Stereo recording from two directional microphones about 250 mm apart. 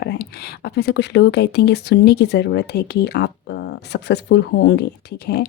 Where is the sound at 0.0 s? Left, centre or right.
Left.